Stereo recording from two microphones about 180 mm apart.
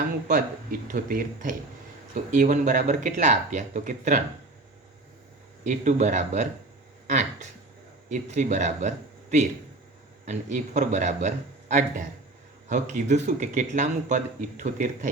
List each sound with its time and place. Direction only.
0.3 s speech: 45° right (ahead or behind)
5.6 s speech: 45° right (ahead or behind)
10.2 s speech: 45° right (ahead or behind)